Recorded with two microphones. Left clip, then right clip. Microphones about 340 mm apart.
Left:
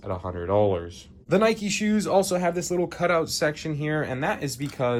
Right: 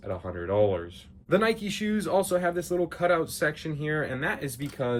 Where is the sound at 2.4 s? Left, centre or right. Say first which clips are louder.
Left 2 dB; left.